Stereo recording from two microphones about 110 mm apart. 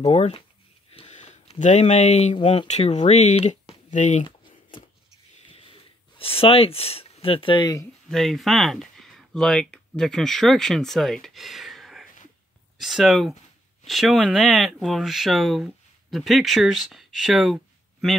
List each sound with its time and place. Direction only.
0.0 s speech: 65° left (ahead or behind)
1.0 s a sound: 90° left
2.3 s speech: 55° left (ahead or behind); by 4.2 s 90° left
5.6 s a sound: 55° left (ahead or behind)
7.6 s speech: 25° left (ahead or behind)
8.1 s speech: centre (ahead or behind)